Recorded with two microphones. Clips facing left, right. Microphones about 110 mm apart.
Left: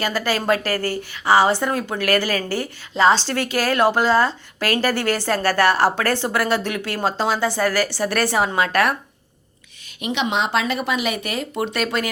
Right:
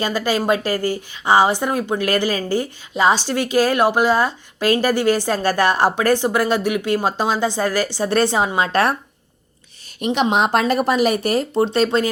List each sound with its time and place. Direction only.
0.0 s a woman's voice: 15° right (ahead or behind)
10.0 s speech: 40° right (ahead or behind)